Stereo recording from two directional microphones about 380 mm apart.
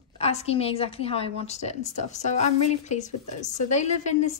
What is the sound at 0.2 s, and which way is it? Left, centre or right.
A woman's voice, centre.